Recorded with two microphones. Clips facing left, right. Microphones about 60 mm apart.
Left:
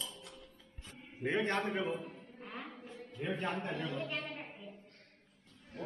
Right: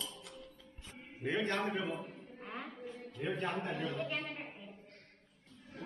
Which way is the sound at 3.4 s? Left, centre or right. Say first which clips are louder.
Even; centre.